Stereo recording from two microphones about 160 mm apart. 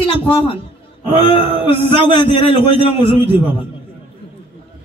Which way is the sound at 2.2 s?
35° left (ahead or behind).